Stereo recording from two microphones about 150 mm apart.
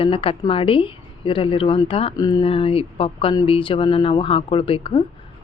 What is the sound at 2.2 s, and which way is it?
Speech, 25° left (ahead or behind).